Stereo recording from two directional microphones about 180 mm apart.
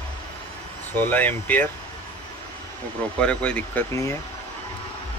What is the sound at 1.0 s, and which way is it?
Speech, 10° left (ahead or behind).